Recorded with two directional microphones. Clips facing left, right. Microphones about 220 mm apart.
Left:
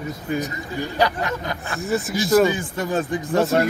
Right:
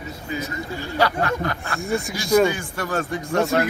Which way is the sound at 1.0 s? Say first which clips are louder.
Right 2 dB; 20° left (ahead or behind).